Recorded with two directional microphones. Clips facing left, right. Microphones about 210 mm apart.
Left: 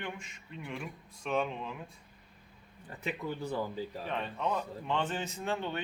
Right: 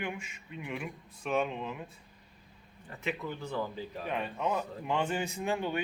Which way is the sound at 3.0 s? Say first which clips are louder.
Even; 35° left (ahead or behind).